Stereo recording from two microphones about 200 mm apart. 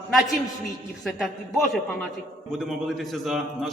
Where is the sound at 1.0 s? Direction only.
Centre (ahead or behind).